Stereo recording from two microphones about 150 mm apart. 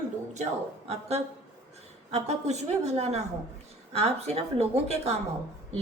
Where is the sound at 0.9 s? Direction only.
45° right (ahead or behind).